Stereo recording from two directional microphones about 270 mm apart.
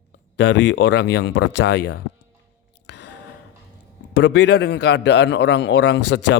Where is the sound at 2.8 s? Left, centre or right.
Left.